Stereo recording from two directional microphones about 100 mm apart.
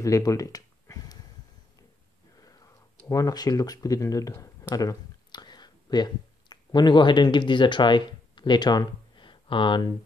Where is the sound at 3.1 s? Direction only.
35° left (ahead or behind).